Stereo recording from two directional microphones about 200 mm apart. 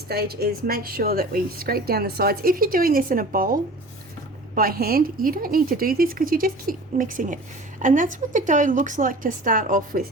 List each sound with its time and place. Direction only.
0.1 s a woman's voice: 50° right (ahead or behind)